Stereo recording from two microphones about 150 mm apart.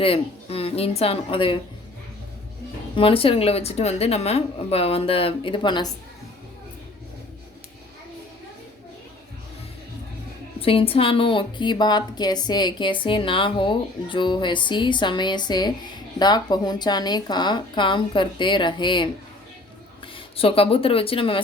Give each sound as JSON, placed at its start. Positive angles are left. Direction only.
{"t": 0.0, "sound": "a woman's voice", "side_deg": 40}
{"t": 2.9, "sound": "a woman's voice", "side_deg": 35}
{"t": 10.6, "sound": "a woman's voice", "side_deg": 40}
{"t": 20.1, "sound": "a woman's voice", "side_deg": 40}